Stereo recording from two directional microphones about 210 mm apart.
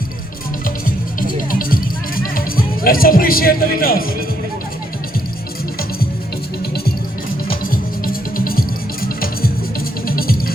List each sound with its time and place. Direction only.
0.9 s music: 40° left (ahead or behind)
7.4 s music: 45° left (ahead or behind)